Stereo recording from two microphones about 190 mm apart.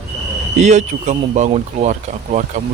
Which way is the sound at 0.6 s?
40° right (ahead or behind).